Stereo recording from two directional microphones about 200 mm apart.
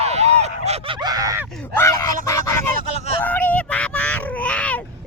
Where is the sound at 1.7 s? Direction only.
15° left (ahead or behind).